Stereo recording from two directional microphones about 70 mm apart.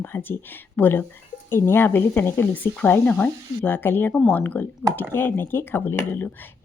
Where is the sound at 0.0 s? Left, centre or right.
Left.